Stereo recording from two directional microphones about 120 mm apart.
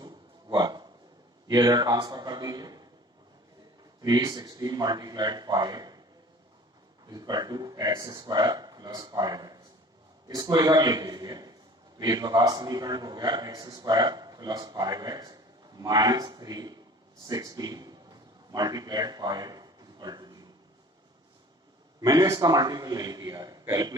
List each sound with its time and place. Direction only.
0.0 s a sound: 35° right (ahead or behind)
1.5 s a man's voice: 30° right (ahead or behind)
4.0 s a man's voice: 35° right (ahead or behind)
7.1 s a man's voice: 35° right (ahead or behind)
17.2 s a sound: 30° right (ahead or behind)
22.0 s a man's voice: 35° right (ahead or behind)